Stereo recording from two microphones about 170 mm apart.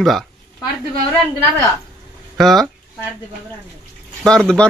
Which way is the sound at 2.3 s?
Centre (ahead or behind).